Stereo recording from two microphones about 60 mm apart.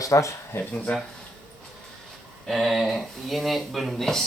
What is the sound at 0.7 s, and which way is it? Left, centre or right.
Speech, centre.